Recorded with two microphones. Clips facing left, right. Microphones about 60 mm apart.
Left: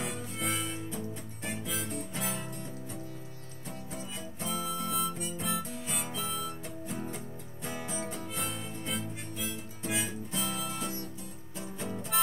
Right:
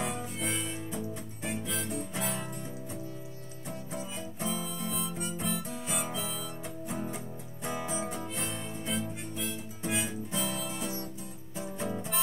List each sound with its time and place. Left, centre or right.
0.0 s harmonica: centre
1.4 s music: centre
1.9 s music: centre
4.5 s harmonica: centre
5.9 s music: centre
6.9 s music: centre
8.4 s harmonica: centre
11.5 s music: right